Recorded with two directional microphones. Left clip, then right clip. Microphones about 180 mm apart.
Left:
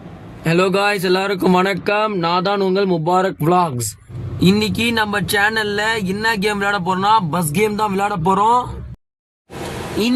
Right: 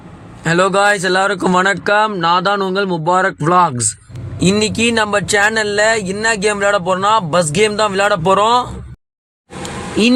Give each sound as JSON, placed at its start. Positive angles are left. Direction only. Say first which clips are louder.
{"t": 0.4, "sound": "speech", "louder": "right 4 dB", "side_deg": -15}